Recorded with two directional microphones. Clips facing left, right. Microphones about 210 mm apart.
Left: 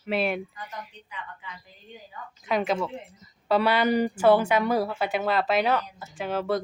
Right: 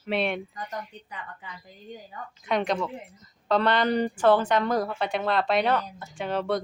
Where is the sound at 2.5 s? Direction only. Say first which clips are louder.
Left 1 dB; 5° left (ahead or behind).